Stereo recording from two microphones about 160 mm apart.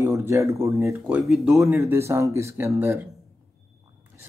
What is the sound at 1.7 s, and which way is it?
Speech, 15° right (ahead or behind).